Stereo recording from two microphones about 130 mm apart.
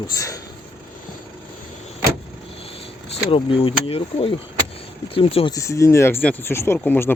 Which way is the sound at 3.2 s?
45° left (ahead or behind).